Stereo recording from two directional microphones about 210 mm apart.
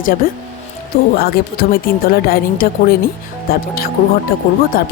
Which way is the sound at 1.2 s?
45° left (ahead or behind).